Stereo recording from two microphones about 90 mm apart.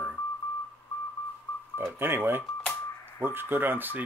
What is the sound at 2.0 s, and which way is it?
Speech, 25° right (ahead or behind).